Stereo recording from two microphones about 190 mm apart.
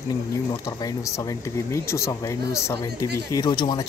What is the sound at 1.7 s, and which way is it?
Speech, 15° left (ahead or behind).